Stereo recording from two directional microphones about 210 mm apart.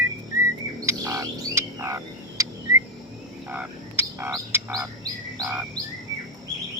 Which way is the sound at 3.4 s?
10° right (ahead or behind).